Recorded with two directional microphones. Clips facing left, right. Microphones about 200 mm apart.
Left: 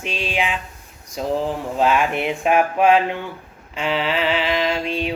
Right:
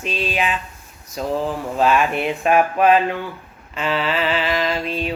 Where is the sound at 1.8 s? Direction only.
15° left (ahead or behind).